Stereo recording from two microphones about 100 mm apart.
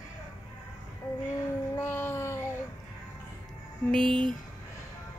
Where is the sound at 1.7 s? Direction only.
25° left (ahead or behind).